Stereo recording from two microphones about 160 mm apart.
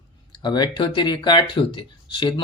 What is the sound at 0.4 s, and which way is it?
Speech, 25° left (ahead or behind).